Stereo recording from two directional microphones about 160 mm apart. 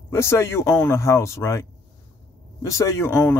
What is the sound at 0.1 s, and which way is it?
Speech, 15° left (ahead or behind).